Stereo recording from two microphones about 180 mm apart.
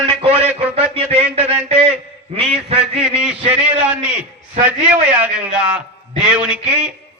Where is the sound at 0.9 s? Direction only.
35° right (ahead or behind).